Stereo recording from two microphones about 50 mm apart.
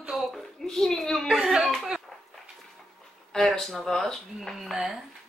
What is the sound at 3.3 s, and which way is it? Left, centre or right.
Speech, centre.